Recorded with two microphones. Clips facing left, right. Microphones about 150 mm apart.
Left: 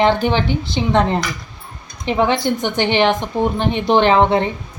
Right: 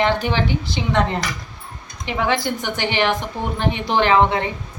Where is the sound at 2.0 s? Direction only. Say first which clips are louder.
Left 4 dB; 25° left (ahead or behind).